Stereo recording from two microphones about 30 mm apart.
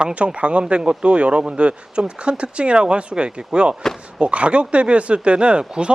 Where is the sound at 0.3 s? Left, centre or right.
Right.